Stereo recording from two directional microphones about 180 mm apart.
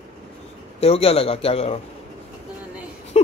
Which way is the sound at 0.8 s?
35° left (ahead or behind).